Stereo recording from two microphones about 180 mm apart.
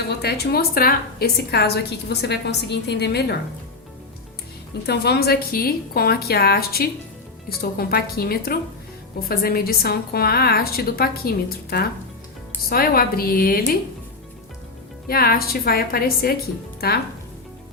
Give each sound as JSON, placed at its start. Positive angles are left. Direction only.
{"t": 0.1, "sound": "a woman's voice", "side_deg": 65}
{"t": 4.9, "sound": "a woman's voice", "side_deg": 65}
{"t": 15.0, "sound": "a woman's voice", "side_deg": 55}